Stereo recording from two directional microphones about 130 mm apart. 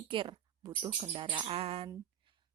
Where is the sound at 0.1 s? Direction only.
40° right (ahead or behind).